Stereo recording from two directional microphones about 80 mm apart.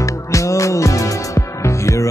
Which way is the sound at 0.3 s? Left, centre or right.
Left.